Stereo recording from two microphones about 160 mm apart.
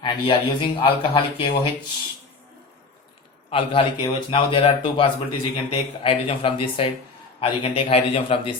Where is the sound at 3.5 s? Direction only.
35° left (ahead or behind).